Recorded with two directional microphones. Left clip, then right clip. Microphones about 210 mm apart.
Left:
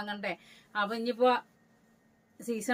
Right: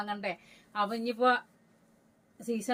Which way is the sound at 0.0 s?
25° left (ahead or behind).